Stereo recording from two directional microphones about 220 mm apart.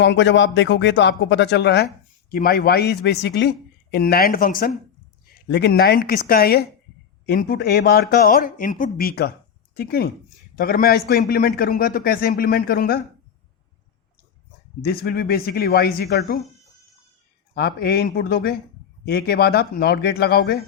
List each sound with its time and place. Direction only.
0.0 s a man's voice: 50° left (ahead or behind)
14.8 s speech: 45° left (ahead or behind)
17.5 s speech: 45° left (ahead or behind)